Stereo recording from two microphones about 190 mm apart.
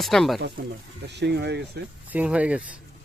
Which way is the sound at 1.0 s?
60° right (ahead or behind).